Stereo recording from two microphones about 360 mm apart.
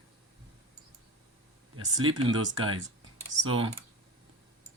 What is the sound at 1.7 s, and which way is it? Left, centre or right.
Speech, right.